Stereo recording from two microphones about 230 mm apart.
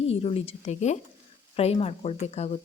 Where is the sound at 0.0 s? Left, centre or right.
Left.